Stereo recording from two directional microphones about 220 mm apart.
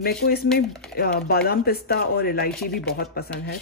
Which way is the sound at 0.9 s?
45° left (ahead or behind).